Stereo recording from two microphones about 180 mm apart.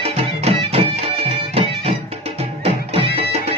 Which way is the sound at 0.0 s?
35° right (ahead or behind).